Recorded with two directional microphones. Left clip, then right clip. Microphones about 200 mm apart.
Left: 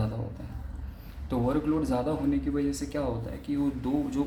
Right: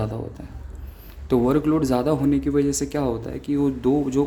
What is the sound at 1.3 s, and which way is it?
A man's voice, 50° right (ahead or behind).